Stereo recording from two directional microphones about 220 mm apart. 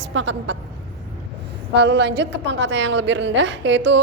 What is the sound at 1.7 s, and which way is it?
A woman's voice, 50° right (ahead or behind).